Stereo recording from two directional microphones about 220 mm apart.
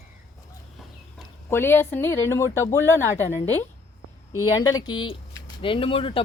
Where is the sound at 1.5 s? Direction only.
10° left (ahead or behind).